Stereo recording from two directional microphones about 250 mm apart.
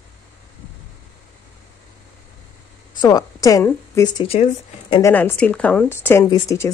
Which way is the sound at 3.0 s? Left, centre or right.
Centre.